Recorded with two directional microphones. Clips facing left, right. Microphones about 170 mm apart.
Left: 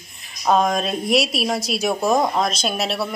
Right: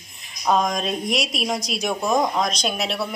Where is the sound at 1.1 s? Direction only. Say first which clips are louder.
Left 8 dB; 5° left (ahead or behind).